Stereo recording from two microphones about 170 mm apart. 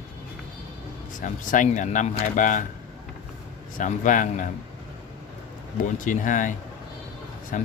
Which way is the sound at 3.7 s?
50° left (ahead or behind).